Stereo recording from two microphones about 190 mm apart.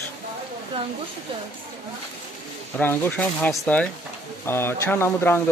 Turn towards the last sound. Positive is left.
turn(degrees=10)  # may be behind; listen again after turning